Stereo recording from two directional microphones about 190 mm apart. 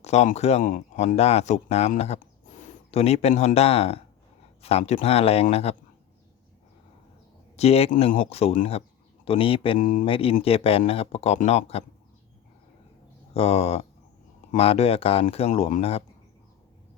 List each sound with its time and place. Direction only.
0.0 s speech: 35° left (ahead or behind)
7.5 s speech: 35° left (ahead or behind)
9.7 s speech: 40° left (ahead or behind)
10.1 s speech: 30° left (ahead or behind)
13.3 s speech: 30° left (ahead or behind)